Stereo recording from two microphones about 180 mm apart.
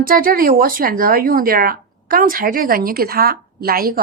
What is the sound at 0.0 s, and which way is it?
Speech, 55° right (ahead or behind).